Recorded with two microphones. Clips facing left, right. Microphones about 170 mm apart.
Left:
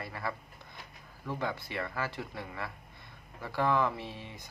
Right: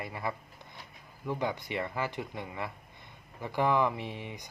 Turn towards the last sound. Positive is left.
turn(degrees=-15)  # may be behind; listen again after turning